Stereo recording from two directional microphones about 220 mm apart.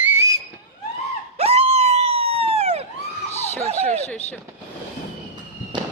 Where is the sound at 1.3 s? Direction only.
25° right (ahead or behind).